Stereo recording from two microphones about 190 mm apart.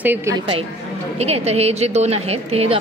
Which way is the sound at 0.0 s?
10° right (ahead or behind).